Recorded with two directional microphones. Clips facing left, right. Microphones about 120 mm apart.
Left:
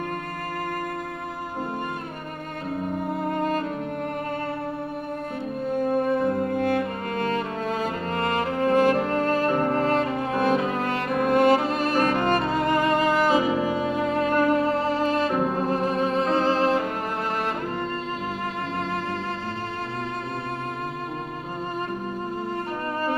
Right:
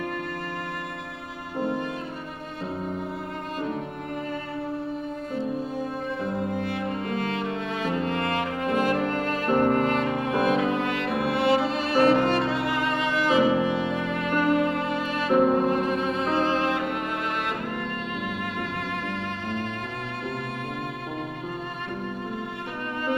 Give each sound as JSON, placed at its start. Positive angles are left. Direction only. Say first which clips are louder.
{"t": 5.7, "sound": "music", "louder": "left 8 dB", "side_deg": 55}